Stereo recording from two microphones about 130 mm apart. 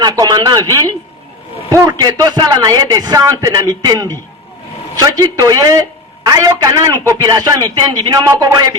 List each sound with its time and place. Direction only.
0.0 s a man's voice: 30° right (ahead or behind)